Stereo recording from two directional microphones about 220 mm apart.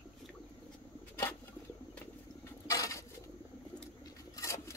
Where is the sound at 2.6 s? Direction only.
15° left (ahead or behind).